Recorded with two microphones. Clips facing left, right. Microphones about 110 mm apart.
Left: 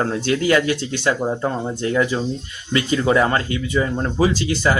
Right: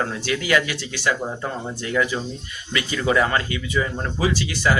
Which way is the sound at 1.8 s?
30° left (ahead or behind).